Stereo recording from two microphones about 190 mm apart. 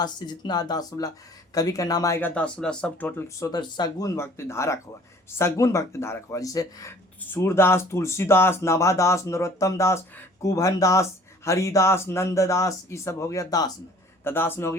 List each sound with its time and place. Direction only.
0.0 s speech: 20° left (ahead or behind)